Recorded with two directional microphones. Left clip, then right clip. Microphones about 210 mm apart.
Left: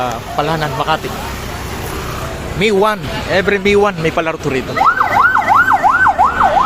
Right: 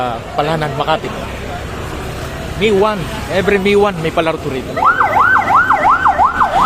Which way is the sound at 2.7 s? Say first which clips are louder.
Even; 20° left (ahead or behind).